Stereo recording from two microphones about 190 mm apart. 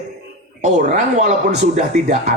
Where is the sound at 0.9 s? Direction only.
40° right (ahead or behind).